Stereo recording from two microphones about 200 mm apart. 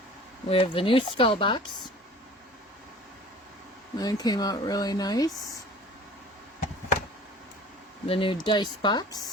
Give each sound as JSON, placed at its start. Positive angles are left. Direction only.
{"t": 0.5, "sound": "speech", "side_deg": 25}
{"t": 3.9, "sound": "speech", "side_deg": 20}
{"t": 8.0, "sound": "speech", "side_deg": 25}